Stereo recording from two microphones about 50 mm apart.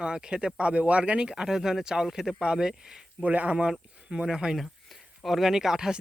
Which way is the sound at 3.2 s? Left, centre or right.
Right.